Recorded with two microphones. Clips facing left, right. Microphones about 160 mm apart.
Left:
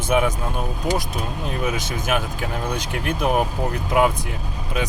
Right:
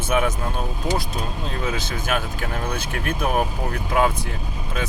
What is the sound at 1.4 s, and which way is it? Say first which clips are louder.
Speech: left 4 dB; 15° left (ahead or behind).